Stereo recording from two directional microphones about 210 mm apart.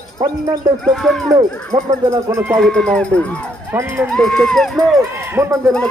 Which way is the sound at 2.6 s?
5° left (ahead or behind).